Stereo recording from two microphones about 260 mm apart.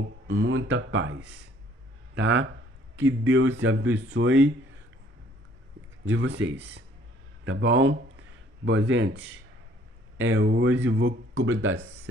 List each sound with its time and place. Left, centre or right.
0.3 s speech: right
6.0 s speech: right